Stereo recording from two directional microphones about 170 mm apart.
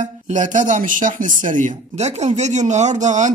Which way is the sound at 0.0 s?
45° right (ahead or behind).